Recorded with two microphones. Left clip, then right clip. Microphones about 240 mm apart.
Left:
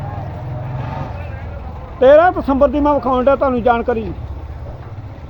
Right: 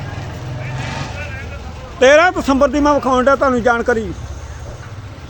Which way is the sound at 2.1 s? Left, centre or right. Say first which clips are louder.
Left 1 dB; right.